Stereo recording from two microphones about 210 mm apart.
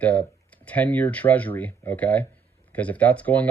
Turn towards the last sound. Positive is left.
turn(degrees=5)  # may be behind; listen again after turning